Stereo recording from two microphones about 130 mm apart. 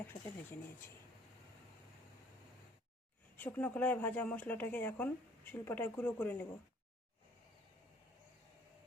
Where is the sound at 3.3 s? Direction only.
15° left (ahead or behind).